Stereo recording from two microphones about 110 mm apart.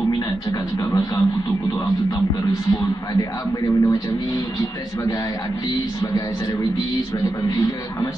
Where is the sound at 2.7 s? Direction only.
30° left (ahead or behind).